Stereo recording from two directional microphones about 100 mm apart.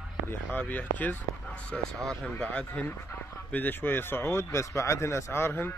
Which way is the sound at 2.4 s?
10° left (ahead or behind).